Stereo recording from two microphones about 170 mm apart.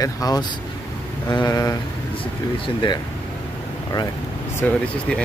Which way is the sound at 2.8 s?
30° left (ahead or behind).